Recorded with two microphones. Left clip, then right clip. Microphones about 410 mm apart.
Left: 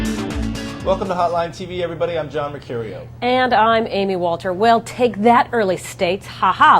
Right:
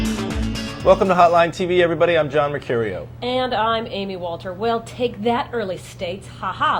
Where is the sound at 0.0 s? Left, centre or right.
Centre.